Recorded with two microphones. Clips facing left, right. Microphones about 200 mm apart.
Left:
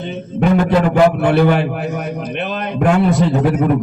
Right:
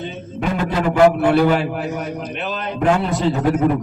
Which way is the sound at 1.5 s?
55° left (ahead or behind).